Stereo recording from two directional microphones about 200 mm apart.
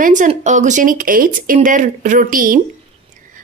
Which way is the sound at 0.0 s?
40° right (ahead or behind).